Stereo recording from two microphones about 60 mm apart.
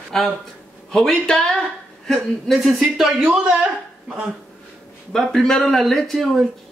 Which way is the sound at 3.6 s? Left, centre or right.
Right.